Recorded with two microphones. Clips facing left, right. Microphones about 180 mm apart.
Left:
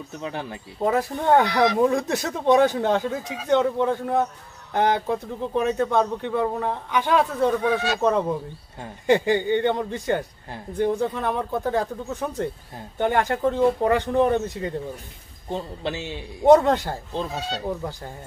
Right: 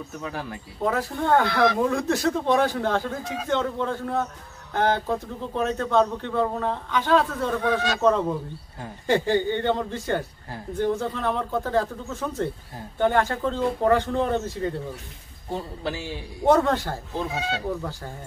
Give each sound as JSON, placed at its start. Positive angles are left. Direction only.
{"t": 0.2, "sound": "speech", "side_deg": 25}
{"t": 15.8, "sound": "a man's voice", "side_deg": 25}
{"t": 17.3, "sound": "speech", "side_deg": 0}